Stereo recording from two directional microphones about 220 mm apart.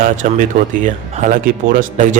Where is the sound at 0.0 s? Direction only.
35° right (ahead or behind).